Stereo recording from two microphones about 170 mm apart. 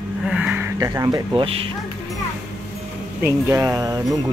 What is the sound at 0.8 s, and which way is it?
Speech, 20° right (ahead or behind).